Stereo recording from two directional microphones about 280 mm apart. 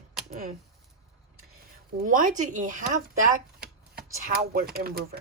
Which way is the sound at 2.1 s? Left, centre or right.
Right.